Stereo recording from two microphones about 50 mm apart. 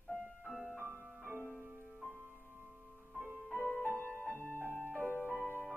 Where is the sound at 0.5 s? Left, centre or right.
Centre.